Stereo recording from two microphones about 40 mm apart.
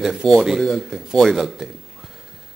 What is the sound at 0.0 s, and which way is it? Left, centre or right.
Speech, centre.